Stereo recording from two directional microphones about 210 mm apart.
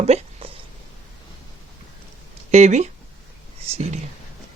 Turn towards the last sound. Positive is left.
turn(degrees=-30)  # may be behind; listen again after turning